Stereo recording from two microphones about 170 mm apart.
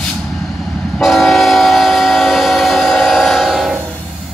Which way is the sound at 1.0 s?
Centre (ahead or behind).